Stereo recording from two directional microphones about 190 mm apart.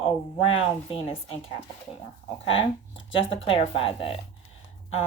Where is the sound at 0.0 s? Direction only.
30° left (ahead or behind).